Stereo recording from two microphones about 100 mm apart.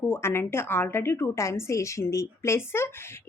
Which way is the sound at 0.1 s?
25° left (ahead or behind).